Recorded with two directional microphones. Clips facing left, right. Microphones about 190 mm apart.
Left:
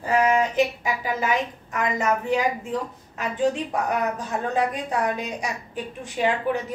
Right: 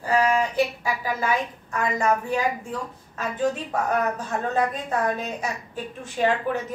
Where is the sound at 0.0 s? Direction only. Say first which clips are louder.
Left 1 dB; 20° left (ahead or behind).